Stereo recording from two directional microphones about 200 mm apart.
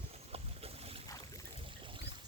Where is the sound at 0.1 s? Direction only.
30° right (ahead or behind).